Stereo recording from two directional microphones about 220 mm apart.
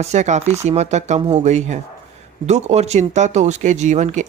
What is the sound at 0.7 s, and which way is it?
Speech, 30° right (ahead or behind).